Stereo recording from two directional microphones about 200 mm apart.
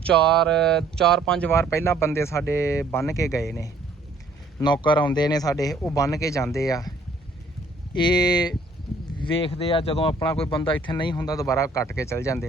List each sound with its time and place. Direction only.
0.0 s speech: 5° left (ahead or behind)
4.6 s speech: 25° left (ahead or behind)
7.9 s speech: 20° left (ahead or behind)